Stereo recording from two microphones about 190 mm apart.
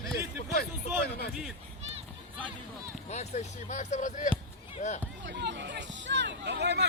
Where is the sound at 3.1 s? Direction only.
35° left (ahead or behind).